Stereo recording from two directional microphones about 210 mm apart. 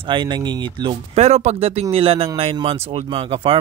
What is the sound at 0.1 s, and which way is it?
Speech, 20° right (ahead or behind).